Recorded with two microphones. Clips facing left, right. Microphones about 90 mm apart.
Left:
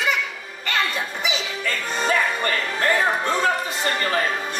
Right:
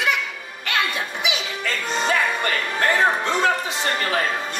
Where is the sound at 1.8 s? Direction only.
20° right (ahead or behind).